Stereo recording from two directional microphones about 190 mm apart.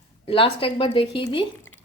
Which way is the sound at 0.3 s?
30° left (ahead or behind).